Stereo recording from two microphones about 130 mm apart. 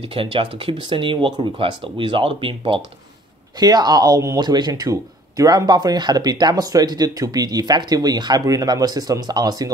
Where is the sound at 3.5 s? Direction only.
30° right (ahead or behind).